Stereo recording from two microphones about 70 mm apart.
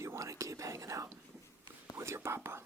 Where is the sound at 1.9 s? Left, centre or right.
Right.